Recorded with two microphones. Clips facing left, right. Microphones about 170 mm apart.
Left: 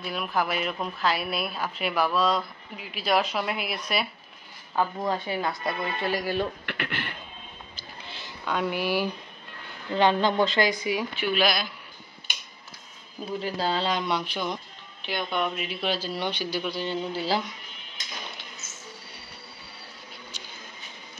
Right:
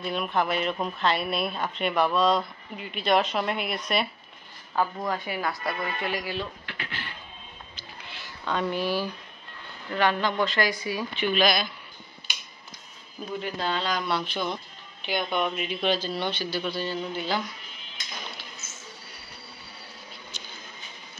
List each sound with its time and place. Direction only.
0.0 s a woman's voice: centre (ahead or behind)
5.0 s speech: 25° left (ahead or behind); by 6.5 s 45° left (ahead or behind)
6.6 s speech: 65° left (ahead or behind)
8.5 s speech: 5° left (ahead or behind)
9.9 s speech: 25° left (ahead or behind); by 11.7 s 10° left (ahead or behind)
13.2 s speech: 35° left (ahead or behind); by 14.6 s 10° left (ahead or behind)
15.0 s speech: centre (ahead or behind)
16.9 s speech: 30° left (ahead or behind)